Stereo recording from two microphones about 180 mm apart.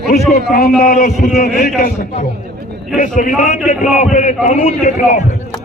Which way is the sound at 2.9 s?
45° left (ahead or behind).